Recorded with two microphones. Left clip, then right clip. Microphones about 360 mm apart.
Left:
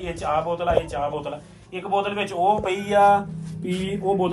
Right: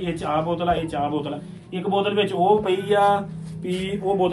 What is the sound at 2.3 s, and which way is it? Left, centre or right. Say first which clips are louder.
A man's voice: even; left.